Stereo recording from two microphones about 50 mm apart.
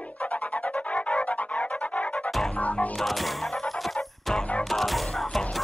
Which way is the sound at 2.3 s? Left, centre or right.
Centre.